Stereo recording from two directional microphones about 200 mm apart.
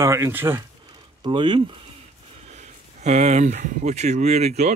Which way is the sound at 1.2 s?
20° right (ahead or behind).